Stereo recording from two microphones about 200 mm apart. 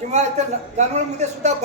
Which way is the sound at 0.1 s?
35° right (ahead or behind).